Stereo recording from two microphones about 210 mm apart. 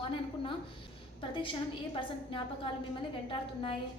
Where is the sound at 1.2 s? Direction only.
25° left (ahead or behind).